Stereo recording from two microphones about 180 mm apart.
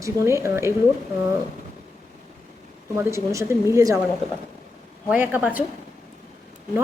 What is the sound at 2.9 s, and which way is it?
Speech, 15° right (ahead or behind).